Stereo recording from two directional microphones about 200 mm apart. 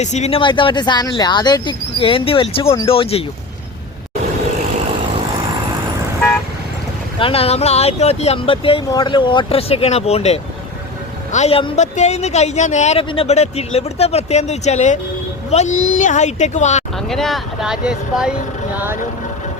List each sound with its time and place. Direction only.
0.0 s speech: 35° left (ahead or behind)
7.2 s speech: 30° left (ahead or behind)
17.1 s speech: centre (ahead or behind)